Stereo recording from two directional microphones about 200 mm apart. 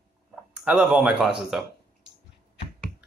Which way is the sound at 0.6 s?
5° right (ahead or behind).